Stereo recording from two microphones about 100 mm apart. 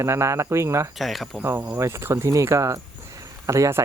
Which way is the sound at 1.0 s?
Centre (ahead or behind).